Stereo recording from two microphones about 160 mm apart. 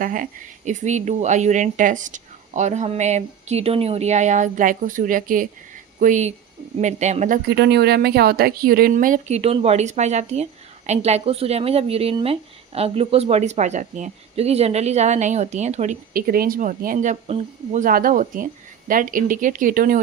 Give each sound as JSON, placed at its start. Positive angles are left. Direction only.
{"t": 0.0, "sound": "speech", "side_deg": -55}
{"t": 7.4, "sound": "speech", "side_deg": -90}
{"t": 16.1, "sound": "speech", "side_deg": -65}